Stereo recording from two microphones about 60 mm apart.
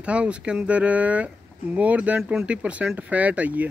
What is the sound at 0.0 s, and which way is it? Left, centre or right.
Speech, centre.